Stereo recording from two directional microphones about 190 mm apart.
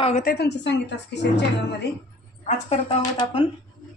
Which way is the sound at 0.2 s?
55° left (ahead or behind).